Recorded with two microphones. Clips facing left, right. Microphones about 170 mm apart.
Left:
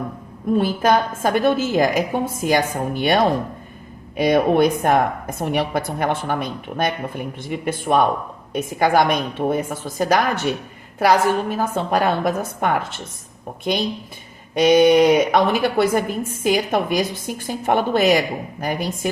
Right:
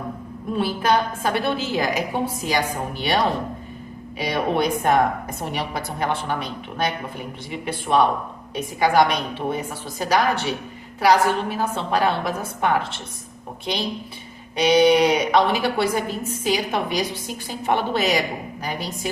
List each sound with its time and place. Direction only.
0.5 s a woman's voice: 45° left (ahead or behind)
4.2 s a woman's voice: 50° left (ahead or behind)
14.5 s a woman's voice: 45° left (ahead or behind)